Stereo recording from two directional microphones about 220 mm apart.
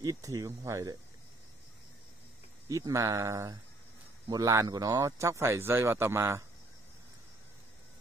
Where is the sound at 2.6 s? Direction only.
15° right (ahead or behind).